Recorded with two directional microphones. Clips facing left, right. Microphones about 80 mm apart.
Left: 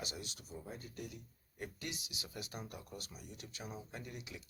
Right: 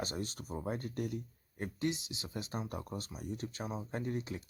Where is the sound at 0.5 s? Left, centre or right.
Right.